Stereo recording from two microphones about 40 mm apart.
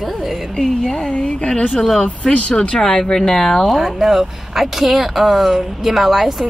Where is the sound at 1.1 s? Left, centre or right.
Left.